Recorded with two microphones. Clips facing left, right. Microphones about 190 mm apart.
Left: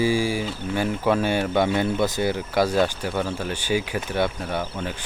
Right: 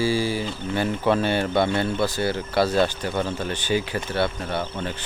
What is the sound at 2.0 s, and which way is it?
Speech, 20° left (ahead or behind).